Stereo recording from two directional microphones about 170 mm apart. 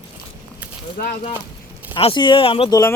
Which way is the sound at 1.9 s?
30° left (ahead or behind).